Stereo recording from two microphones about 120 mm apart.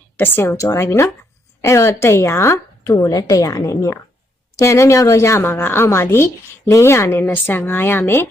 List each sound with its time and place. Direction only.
0.2 s a woman's voice: 20° left (ahead or behind)